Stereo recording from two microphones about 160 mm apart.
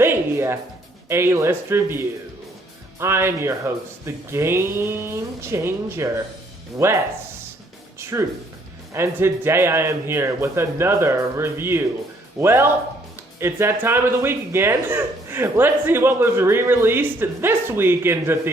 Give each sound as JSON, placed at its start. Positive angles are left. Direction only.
{"t": 0.0, "sound": "music", "side_deg": -15}
{"t": 1.0, "sound": "speech", "side_deg": -15}
{"t": 7.9, "sound": "music", "side_deg": -15}
{"t": 8.9, "sound": "speech", "side_deg": -15}